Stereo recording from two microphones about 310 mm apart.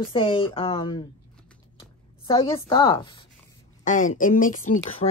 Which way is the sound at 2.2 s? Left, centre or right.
Centre.